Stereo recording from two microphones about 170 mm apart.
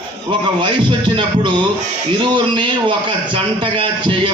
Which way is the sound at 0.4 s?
25° right (ahead or behind).